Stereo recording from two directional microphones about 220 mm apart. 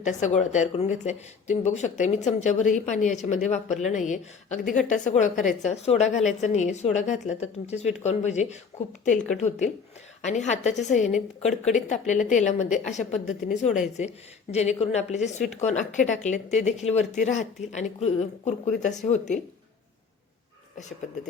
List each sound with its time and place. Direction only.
0.0 s speech: 35° left (ahead or behind)
10.2 s a woman's voice: 30° left (ahead or behind)